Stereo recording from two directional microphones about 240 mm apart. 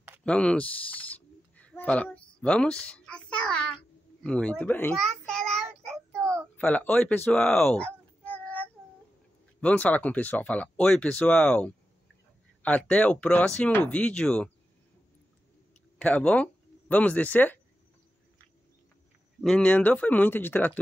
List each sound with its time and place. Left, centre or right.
0.2 s a sound: centre
6.5 s speech: centre
16.0 s speech: centre
19.4 s speech: centre